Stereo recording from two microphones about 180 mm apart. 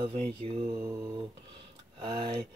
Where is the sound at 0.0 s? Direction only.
35° right (ahead or behind).